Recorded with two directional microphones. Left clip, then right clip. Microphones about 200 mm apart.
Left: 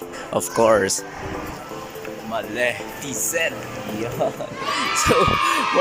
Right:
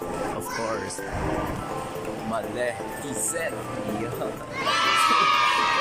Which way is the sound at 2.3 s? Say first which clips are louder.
Left 6 dB; centre (ahead or behind).